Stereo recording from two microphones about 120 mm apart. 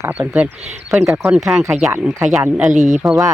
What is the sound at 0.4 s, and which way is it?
Speech, 70° right (ahead or behind).